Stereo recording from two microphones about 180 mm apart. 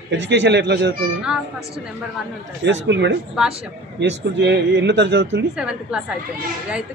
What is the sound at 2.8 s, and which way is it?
Speech, 75° right (ahead or behind).